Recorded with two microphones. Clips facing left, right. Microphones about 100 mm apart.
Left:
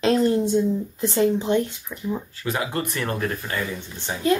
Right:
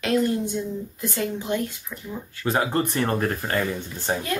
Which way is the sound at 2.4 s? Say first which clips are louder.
Right 6 dB; 35° right (ahead or behind).